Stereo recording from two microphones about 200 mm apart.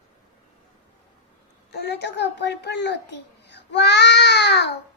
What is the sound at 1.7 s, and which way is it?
A child's voice, 55° left (ahead or behind).